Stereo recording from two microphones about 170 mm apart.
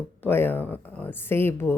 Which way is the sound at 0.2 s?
10° left (ahead or behind).